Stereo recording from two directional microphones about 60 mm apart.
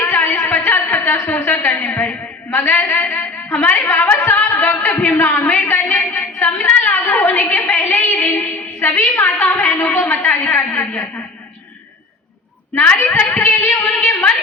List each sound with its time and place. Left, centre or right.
0.0 s a sound: left
2.5 s a woman's voice: left
3.8 s singing: left
5.5 s a sound: left
9.2 s a woman's voice: left
12.8 s a woman's voice: left